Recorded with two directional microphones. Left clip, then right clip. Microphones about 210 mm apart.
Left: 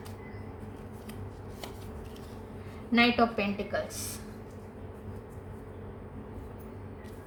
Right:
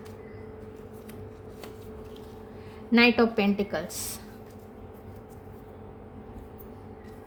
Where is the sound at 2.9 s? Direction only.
50° right (ahead or behind).